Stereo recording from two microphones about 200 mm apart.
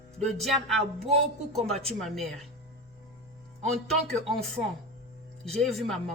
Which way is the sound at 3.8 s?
Centre (ahead or behind).